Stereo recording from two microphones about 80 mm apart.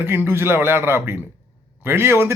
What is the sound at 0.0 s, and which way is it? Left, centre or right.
Speech, right.